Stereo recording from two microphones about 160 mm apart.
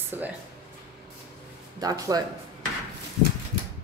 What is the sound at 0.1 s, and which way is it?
Speech, 15° right (ahead or behind).